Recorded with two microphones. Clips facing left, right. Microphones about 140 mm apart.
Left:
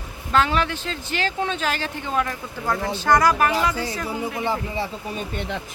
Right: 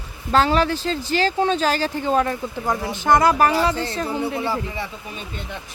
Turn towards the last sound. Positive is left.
turn(degrees=20)  # may be behind; listen again after turning